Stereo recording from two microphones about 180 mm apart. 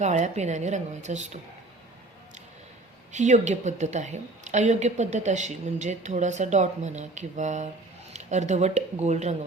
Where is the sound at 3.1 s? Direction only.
40° right (ahead or behind).